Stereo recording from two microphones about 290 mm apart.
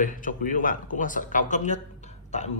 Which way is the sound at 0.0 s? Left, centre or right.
Left.